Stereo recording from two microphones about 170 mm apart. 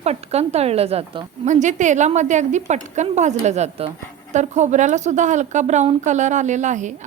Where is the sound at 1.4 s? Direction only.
45° right (ahead or behind).